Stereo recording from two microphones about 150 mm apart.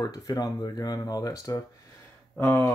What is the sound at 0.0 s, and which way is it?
Speech, 25° left (ahead or behind).